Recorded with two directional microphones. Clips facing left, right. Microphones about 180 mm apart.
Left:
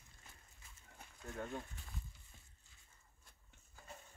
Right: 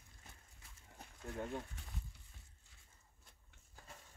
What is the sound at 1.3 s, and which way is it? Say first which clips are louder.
Speech: right 2 dB; 5° right (ahead or behind).